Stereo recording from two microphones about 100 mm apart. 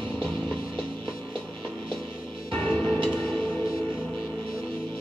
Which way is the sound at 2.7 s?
55° right (ahead or behind).